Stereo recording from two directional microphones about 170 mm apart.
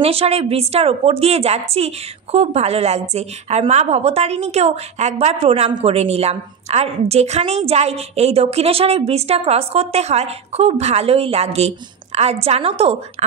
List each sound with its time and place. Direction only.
0.0 s a woman's voice: 35° right (ahead or behind)